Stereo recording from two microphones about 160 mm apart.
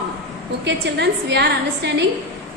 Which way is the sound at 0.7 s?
90° right.